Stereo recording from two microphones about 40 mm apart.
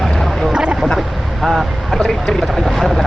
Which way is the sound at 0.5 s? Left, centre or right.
Right.